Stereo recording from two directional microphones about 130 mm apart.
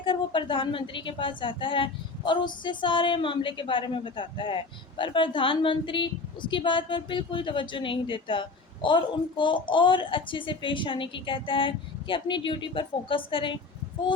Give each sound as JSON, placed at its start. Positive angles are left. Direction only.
{"t": 0.0, "sound": "a woman's voice", "side_deg": 40}